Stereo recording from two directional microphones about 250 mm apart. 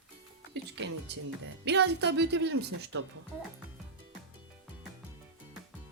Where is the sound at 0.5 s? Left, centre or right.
Right.